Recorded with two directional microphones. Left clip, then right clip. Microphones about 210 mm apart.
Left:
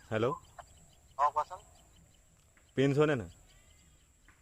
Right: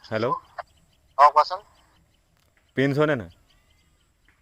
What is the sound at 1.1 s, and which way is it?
Speech, 45° right (ahead or behind).